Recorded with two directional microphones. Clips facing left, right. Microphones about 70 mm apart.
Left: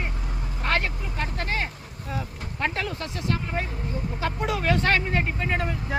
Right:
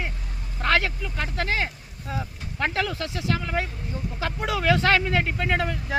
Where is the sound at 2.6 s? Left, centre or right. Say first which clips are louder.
Right 2 dB; right.